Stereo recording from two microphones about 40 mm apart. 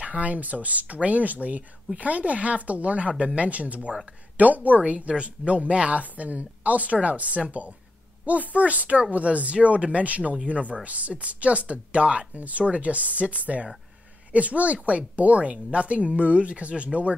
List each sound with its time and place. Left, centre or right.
0.0 s speech: right